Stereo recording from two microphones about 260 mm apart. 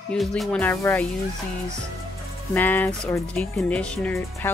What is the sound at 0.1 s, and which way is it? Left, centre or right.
Speech, centre.